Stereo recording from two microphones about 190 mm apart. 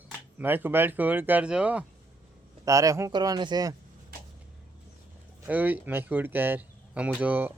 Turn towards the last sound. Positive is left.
turn(degrees=-10)  # may be behind; listen again after turning